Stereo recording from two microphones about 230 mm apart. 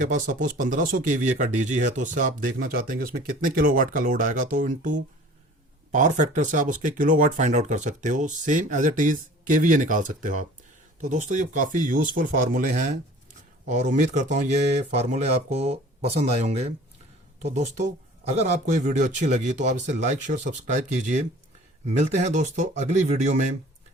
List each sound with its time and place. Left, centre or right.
0.0 s speech: right